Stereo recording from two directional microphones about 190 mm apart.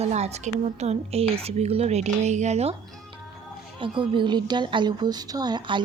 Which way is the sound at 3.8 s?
25° right (ahead or behind).